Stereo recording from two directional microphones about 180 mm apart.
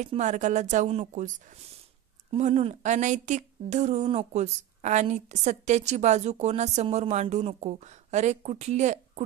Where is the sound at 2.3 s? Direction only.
35° right (ahead or behind).